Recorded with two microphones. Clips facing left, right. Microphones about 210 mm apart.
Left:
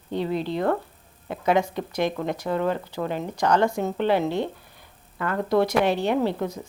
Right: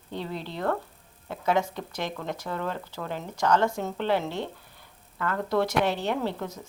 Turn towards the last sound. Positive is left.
turn(degrees=15)  # may be behind; listen again after turning